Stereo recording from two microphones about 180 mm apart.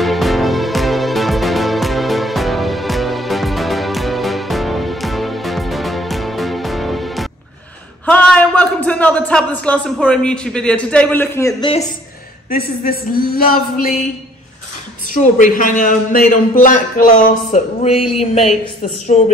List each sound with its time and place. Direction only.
0.0 s music: centre (ahead or behind)
8.0 s a sound: 5° left (ahead or behind)
12.4 s speech: 55° left (ahead or behind)
15.3 s a man's voice: 45° left (ahead or behind)